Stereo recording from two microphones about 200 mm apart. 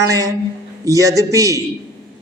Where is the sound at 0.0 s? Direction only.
15° right (ahead or behind).